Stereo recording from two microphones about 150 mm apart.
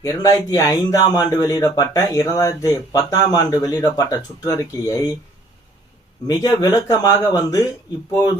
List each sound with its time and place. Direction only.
0.0 s speech: 20° left (ahead or behind)
6.2 s speech: 25° left (ahead or behind)